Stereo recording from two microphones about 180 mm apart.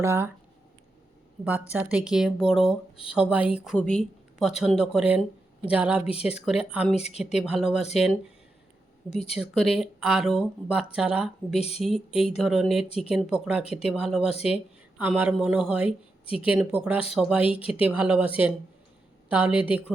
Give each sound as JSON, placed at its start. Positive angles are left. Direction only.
{"t": 0.0, "sound": "speech", "side_deg": -15}
{"t": 1.5, "sound": "speech", "side_deg": -5}
{"t": 3.8, "sound": "speech", "side_deg": 5}
{"t": 6.9, "sound": "speech", "side_deg": 35}
{"t": 7.2, "sound": "speech", "side_deg": -5}
{"t": 9.0, "sound": "speech", "side_deg": 35}
{"t": 9.3, "sound": "speech", "side_deg": -5}
{"t": 11.5, "sound": "speech", "side_deg": 35}
{"t": 11.8, "sound": "speech", "side_deg": 0}
{"t": 16.2, "sound": "speech", "side_deg": 30}
{"t": 16.6, "sound": "speech", "side_deg": -5}
{"t": 19.3, "sound": "speech", "side_deg": -10}